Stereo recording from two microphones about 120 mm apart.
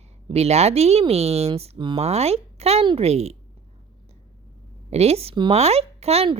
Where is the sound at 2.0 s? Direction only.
60° right (ahead or behind).